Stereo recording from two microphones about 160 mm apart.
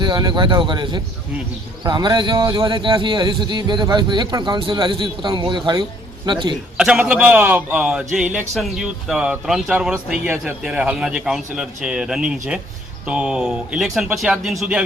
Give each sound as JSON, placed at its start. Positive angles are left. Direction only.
{"t": 0.0, "sound": "speech", "side_deg": -25}
{"t": 6.7, "sound": "a man's voice", "side_deg": -5}